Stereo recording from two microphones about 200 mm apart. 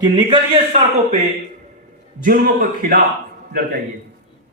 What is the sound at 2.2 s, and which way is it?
Speech, 45° right (ahead or behind).